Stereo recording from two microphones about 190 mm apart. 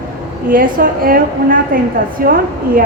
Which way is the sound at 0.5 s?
45° right (ahead or behind).